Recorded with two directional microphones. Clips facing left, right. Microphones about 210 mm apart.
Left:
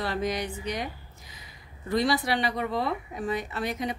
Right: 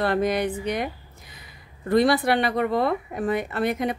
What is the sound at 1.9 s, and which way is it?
Speech, 55° right (ahead or behind).